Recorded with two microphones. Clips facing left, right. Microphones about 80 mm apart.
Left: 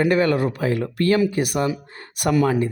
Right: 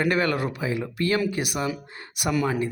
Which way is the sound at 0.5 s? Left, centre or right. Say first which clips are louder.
Left 5 dB; left.